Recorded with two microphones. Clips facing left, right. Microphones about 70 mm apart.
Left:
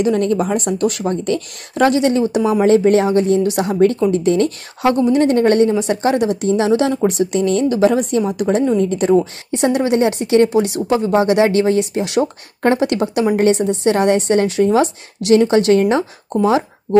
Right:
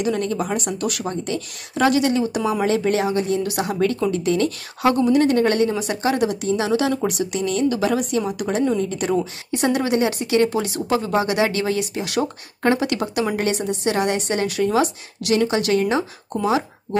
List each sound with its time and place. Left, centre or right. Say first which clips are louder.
0.0 s speech: left 6 dB; left
8.2 s speech: left 5 dB; left